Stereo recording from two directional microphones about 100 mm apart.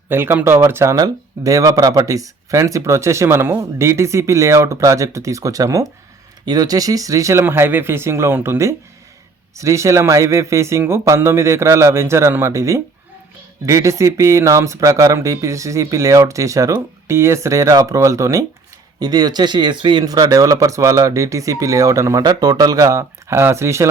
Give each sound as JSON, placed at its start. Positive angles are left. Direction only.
{"t": 0.1, "sound": "speech", "side_deg": -25}
{"t": 0.9, "sound": "speech", "side_deg": -35}